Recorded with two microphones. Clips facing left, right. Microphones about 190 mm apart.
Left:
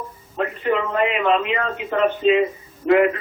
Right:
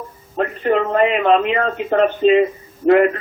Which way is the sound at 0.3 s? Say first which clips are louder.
Right 4 dB; 45° right (ahead or behind).